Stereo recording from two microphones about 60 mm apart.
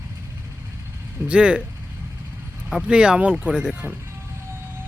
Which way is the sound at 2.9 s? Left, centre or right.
Centre.